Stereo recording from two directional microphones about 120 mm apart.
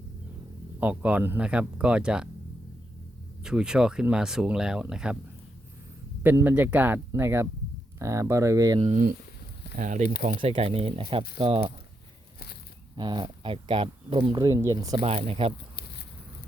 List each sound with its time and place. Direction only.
0.8 s speech: 10° right (ahead or behind)
3.4 s speech: 5° right (ahead or behind)
6.2 s speech: 15° right (ahead or behind)
8.8 s speech: 65° right (ahead or behind)
9.7 s speech: 90° right
10.4 s speech: 50° right (ahead or behind)
13.0 s speech: 40° right (ahead or behind)
15.0 s speech: 55° right (ahead or behind)